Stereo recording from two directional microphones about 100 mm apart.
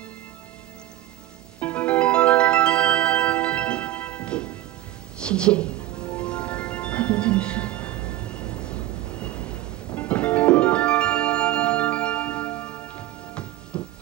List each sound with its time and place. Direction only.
1.6 s music: 15° left (ahead or behind)